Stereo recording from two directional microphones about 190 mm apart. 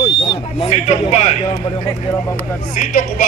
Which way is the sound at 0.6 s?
35° left (ahead or behind).